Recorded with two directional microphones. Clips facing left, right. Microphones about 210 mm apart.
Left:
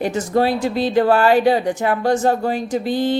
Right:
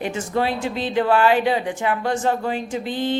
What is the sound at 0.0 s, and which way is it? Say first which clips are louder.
Speech: left 5 dB; 40° left (ahead or behind).